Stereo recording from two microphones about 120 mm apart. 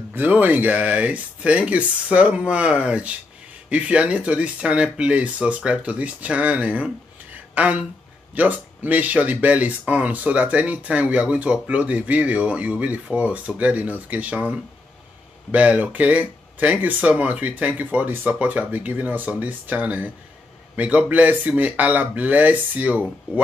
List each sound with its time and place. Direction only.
0.1 s speech: 15° right (ahead or behind)